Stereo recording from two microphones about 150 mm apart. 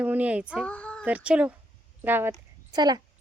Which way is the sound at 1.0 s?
10° right (ahead or behind).